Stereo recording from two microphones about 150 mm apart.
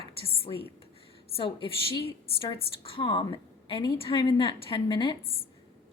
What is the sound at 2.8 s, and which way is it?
A woman's voice, 35° left (ahead or behind).